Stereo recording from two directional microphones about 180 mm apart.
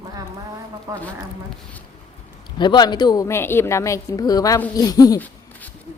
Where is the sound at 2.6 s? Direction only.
25° left (ahead or behind).